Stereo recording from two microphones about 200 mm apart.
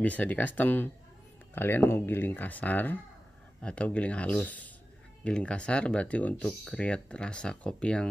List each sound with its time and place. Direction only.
0.0 s speech: 10° left (ahead or behind)